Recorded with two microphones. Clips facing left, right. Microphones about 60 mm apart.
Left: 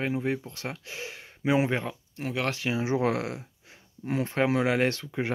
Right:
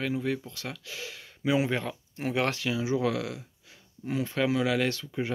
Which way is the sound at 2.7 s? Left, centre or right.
Left.